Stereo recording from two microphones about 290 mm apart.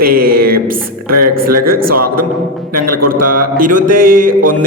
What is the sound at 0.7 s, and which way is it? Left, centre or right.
A woman's voice, right.